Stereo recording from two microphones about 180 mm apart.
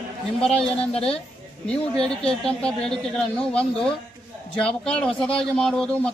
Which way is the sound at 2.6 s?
5° left (ahead or behind).